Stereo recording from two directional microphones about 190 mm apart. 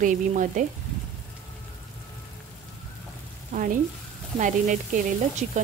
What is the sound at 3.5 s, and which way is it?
Speech, 45° right (ahead or behind).